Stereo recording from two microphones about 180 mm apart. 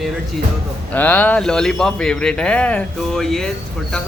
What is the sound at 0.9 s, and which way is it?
Speech, 10° left (ahead or behind).